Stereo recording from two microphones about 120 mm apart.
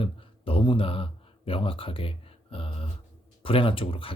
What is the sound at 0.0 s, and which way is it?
Speech, 50° left (ahead or behind).